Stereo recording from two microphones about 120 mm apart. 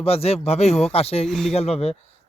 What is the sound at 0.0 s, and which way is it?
Speech, 55° left (ahead or behind).